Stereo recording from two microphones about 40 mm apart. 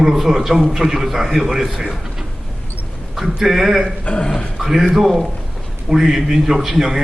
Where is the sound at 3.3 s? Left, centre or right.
Centre.